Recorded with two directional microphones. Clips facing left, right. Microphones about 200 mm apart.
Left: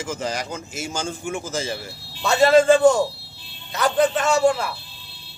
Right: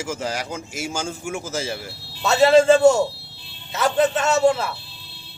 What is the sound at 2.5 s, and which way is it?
Speech, 25° right (ahead or behind).